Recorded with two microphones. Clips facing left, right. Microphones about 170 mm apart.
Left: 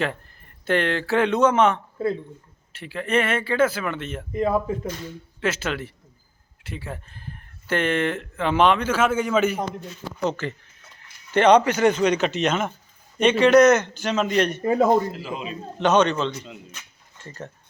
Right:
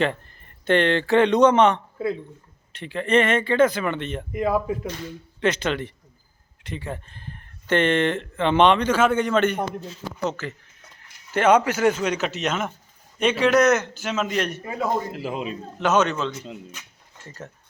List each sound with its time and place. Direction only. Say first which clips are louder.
0.0 s a man's voice: right 3 dB; 5° left (ahead or behind)
14.6 s a man's voice: left 9 dB; 35° left (ahead or behind)
15.1 s a man's voice: right 3 dB; 60° right (ahead or behind)
15.8 s speech: left 2 dB; 5° right (ahead or behind)
17.2 s speech: left 2 dB; 5° right (ahead or behind)